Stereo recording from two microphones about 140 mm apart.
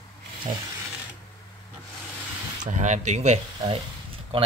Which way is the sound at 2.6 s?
60° right (ahead or behind).